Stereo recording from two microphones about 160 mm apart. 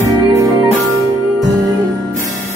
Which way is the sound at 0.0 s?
20° right (ahead or behind).